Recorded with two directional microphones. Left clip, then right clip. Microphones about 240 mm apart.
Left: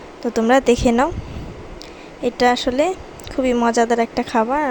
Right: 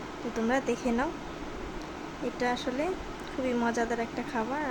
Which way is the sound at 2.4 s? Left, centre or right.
Left.